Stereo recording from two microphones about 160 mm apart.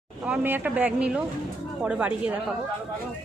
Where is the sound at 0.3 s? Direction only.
10° right (ahead or behind).